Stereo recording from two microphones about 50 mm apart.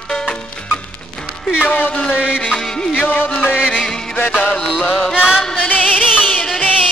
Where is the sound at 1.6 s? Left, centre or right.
Left.